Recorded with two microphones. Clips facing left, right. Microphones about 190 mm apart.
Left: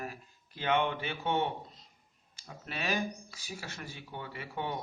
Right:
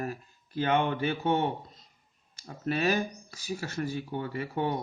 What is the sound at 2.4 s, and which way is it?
A man's voice, 45° right (ahead or behind).